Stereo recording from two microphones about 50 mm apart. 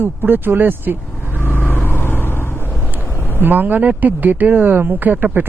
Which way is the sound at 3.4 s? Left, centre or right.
Right.